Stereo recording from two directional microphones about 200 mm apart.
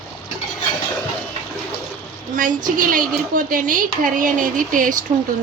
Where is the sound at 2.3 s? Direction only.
40° right (ahead or behind).